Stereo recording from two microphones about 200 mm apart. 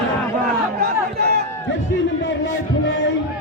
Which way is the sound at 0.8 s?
50° right (ahead or behind).